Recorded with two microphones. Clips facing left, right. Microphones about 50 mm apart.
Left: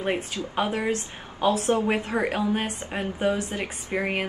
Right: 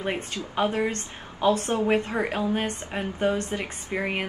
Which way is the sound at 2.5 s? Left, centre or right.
Centre.